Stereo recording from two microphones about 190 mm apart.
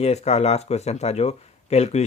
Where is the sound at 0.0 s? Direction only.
35° left (ahead or behind).